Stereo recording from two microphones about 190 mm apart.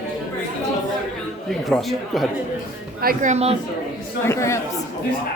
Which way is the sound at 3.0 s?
45° right (ahead or behind).